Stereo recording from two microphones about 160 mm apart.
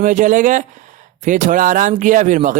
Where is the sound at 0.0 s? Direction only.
50° right (ahead or behind).